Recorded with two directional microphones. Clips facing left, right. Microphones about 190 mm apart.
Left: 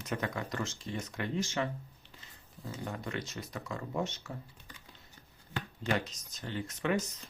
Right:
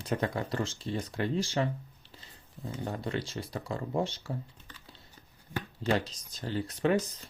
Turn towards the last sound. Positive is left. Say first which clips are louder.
# right 5 dB
turn(degrees=-35)  # may be behind; listen again after turning